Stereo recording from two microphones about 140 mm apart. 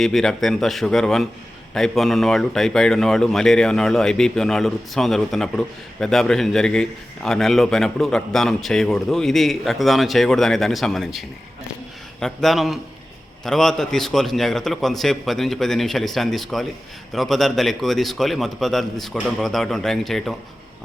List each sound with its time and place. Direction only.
0.0 s speech: centre (ahead or behind)